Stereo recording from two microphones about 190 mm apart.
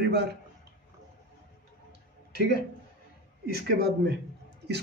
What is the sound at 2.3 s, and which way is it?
A man's voice, 60° right (ahead or behind).